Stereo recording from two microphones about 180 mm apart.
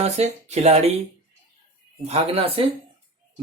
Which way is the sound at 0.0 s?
35° right (ahead or behind).